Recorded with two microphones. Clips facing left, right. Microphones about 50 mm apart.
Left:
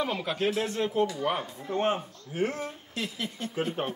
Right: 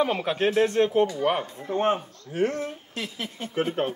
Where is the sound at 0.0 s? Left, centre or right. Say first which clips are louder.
Right 5 dB; right.